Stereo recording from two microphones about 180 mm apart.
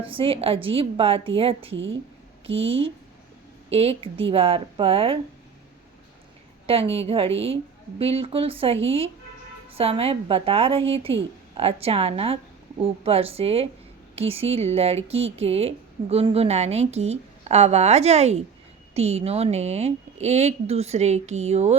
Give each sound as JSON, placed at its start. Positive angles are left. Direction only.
{"t": 0.0, "sound": "speech", "side_deg": -30}
{"t": 6.7, "sound": "speech", "side_deg": -35}